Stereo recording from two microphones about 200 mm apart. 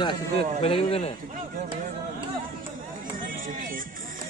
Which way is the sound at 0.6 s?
25° left (ahead or behind).